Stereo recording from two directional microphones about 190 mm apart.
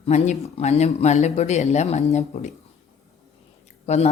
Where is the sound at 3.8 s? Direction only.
35° left (ahead or behind).